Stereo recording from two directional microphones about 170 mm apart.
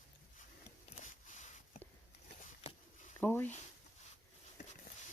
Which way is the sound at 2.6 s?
40° left (ahead or behind).